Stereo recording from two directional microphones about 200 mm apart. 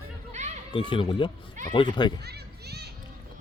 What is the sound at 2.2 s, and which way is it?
Children playing, 55° right (ahead or behind).